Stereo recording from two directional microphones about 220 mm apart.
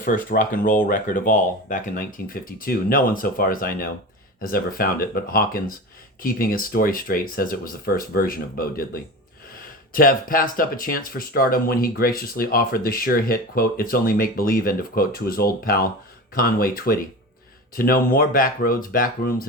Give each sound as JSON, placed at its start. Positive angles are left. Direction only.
{"t": 0.0, "sound": "speech", "side_deg": 35}